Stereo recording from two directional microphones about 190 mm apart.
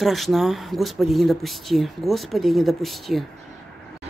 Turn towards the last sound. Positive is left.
turn(degrees=0)  # may be behind; listen again after turning